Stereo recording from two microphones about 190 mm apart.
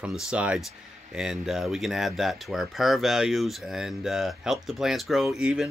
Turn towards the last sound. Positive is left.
turn(degrees=-5)  # may be behind; listen again after turning